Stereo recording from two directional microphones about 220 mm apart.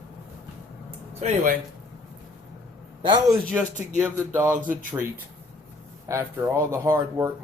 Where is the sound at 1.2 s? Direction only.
30° right (ahead or behind).